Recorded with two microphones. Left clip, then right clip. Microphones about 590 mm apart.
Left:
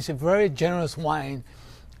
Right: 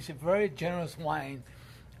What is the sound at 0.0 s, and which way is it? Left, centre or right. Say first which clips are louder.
Speech: left 7 dB; left.